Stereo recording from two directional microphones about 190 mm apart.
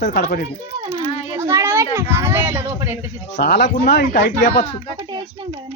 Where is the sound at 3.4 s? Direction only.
60° left (ahead or behind).